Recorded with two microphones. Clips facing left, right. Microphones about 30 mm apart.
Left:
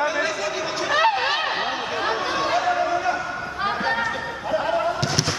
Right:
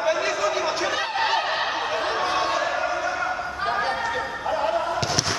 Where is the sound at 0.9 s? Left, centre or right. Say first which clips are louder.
Left 7 dB; left.